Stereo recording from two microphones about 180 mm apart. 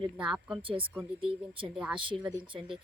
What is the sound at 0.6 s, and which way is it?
Speech, 30° right (ahead or behind).